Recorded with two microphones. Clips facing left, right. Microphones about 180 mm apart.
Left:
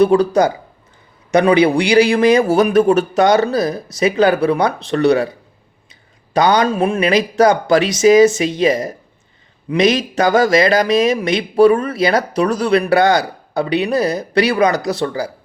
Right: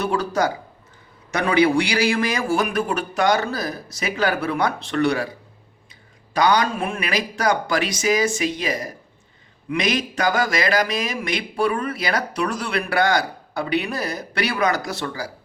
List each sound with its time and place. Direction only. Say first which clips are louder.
0.1 s a man's voice: left 9 dB; 20° left (ahead or behind)
6.3 s speech: left 5 dB; 25° left (ahead or behind)
11.5 s speech: left 12 dB; 40° left (ahead or behind)
11.9 s speech: left 8 dB; 25° left (ahead or behind)